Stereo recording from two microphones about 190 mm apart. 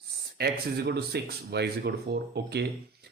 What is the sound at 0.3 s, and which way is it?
Speech, 60° right (ahead or behind).